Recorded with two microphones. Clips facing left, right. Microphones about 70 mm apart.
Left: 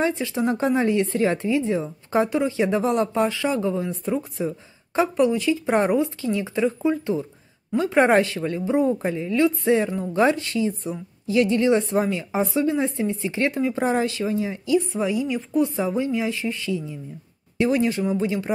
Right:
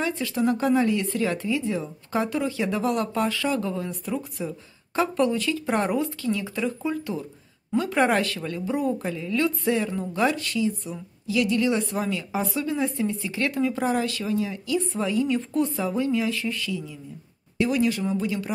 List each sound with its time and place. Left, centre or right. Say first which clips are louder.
0.0 s speech: left 2 dB; left
15.0 s a woman's voice: even; centre
15.8 s speech: left 1 dB; left